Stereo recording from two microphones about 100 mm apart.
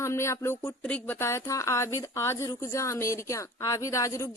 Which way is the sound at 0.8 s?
15° left (ahead or behind).